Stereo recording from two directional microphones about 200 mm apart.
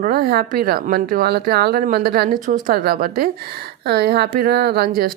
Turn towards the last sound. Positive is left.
turn(degrees=-50)  # may be behind; listen again after turning